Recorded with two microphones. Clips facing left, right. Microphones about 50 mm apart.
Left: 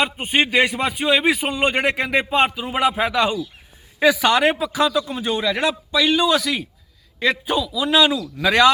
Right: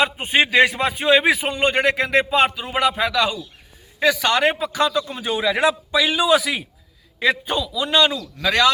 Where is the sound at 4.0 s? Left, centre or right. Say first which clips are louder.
Left 2 dB; centre.